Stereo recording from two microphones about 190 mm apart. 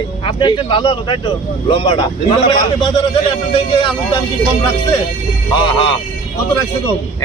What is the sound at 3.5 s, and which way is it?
Speech, 25° left (ahead or behind).